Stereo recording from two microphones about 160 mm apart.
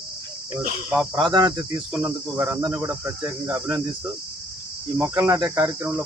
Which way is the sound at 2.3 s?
10° right (ahead or behind).